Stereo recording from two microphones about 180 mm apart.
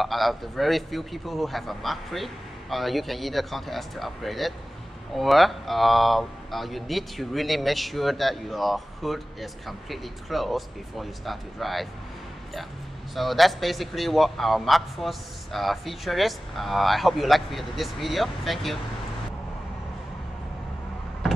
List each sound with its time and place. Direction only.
0.0 s speech: centre (ahead or behind)
13.1 s speech: centre (ahead or behind)